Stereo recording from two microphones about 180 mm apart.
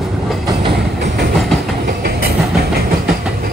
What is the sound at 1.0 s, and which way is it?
Train, 60° right (ahead or behind).